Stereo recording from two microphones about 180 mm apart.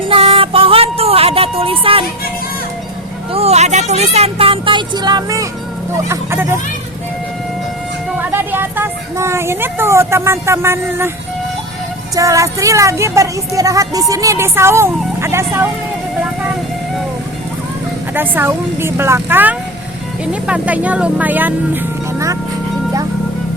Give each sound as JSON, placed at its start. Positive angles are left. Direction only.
{"t": 0.1, "sound": "music", "side_deg": -30}
{"t": 3.3, "sound": "speech", "side_deg": -35}
{"t": 8.2, "sound": "speech", "side_deg": -10}
{"t": 12.1, "sound": "speech", "side_deg": -20}
{"t": 18.1, "sound": "speech", "side_deg": -10}